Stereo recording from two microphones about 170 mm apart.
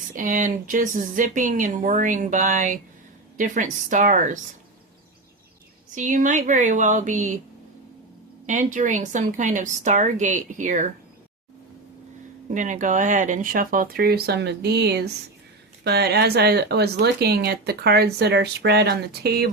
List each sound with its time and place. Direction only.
0.1 s speech: 50° right (ahead or behind)
5.9 s speech: 50° right (ahead or behind)
8.4 s speech: 50° right (ahead or behind)
12.5 s speech: 50° right (ahead or behind); by 19.5 s 70° right (ahead or behind)